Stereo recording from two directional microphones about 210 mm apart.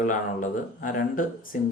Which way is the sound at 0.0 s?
40° left (ahead or behind).